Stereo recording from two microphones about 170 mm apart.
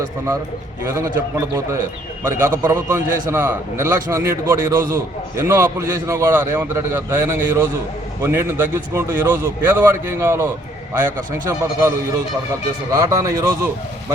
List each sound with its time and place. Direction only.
0.9 s a man's voice: 15° right (ahead or behind)